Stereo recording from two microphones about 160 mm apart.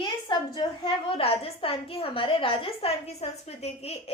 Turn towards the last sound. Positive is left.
turn(degrees=40)  # may be behind; listen again after turning